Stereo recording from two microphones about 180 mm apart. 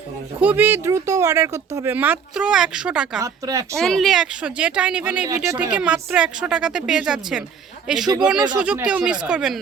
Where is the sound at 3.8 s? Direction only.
Centre (ahead or behind); by 5.6 s 15° right (ahead or behind).